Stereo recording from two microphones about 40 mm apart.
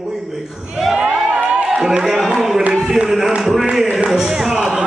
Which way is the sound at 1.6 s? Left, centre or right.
Centre.